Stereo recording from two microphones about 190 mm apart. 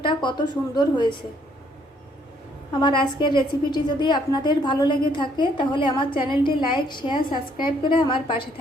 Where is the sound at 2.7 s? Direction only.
25° left (ahead or behind).